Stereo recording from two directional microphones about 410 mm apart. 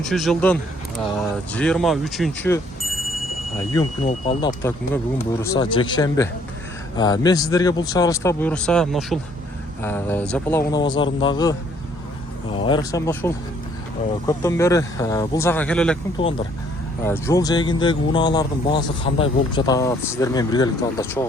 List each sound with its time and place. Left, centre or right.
0.0 s speech: centre
3.7 s speech: centre
12.5 s speech: centre